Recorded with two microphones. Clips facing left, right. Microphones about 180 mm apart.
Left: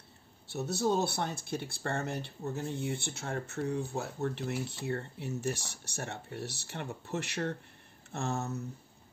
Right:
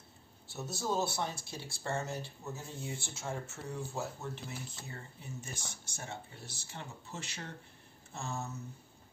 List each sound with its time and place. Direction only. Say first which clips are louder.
0.7 s speech: left 5 dB; 65° left (ahead or behind)